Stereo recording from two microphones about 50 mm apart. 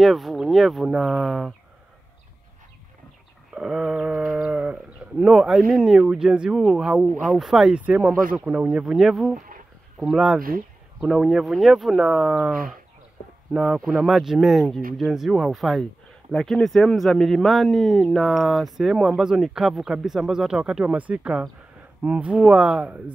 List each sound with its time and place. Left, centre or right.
0.0 s speech: centre
3.6 s mantra: centre
4.1 s livestock: centre
4.4 s livestock: centre
5.2 s speech: centre
7.7 s speech: right; by 12.4 s centre
13.5 s speech: centre
20.8 s speech: right